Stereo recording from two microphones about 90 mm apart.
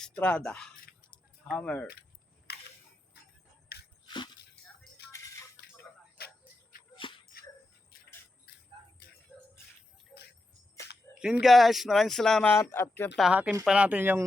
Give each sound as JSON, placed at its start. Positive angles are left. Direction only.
{"t": 0.0, "sound": "speech", "side_deg": 15}
{"t": 4.0, "sound": "dog", "side_deg": 55}
{"t": 5.1, "sound": "music", "side_deg": 35}
{"t": 6.9, "sound": "a sound", "side_deg": 70}
{"t": 10.1, "sound": "a sound", "side_deg": 5}
{"t": 11.1, "sound": "speech", "side_deg": -5}
{"t": 12.5, "sound": "speech", "side_deg": 25}
{"t": 13.3, "sound": "speech", "side_deg": -15}